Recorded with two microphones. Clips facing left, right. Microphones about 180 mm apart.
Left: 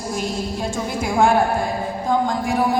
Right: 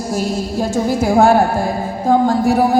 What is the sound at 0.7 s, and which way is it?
A woman's voice, 40° right (ahead or behind).